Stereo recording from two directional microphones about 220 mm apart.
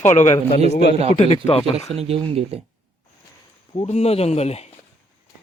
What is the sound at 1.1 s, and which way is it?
Speech, 25° left (ahead or behind).